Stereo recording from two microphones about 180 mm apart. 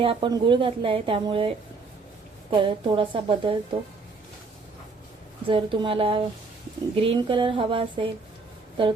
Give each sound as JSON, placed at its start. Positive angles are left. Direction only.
{"t": 0.0, "sound": "a woman's voice", "side_deg": -30}
{"t": 5.5, "sound": "a woman's voice", "side_deg": -30}